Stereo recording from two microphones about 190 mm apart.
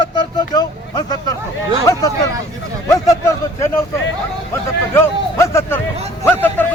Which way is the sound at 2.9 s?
15° left (ahead or behind).